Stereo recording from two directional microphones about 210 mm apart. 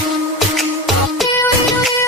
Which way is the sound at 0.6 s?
Centre (ahead or behind).